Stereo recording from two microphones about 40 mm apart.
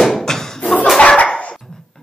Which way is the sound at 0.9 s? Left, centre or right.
Left.